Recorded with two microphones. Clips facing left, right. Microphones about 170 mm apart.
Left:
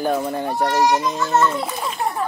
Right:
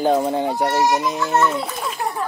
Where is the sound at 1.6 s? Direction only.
Centre (ahead or behind).